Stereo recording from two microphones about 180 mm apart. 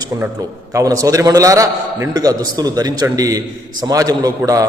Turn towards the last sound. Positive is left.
turn(degrees=-20)  # may be behind; listen again after turning